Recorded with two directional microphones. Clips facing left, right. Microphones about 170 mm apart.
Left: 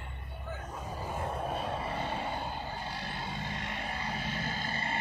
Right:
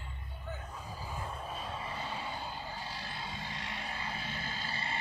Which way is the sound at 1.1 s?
60° left (ahead or behind).